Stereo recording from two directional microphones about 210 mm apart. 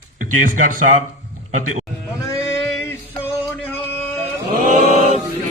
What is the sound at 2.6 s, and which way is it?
Male singing, centre (ahead or behind).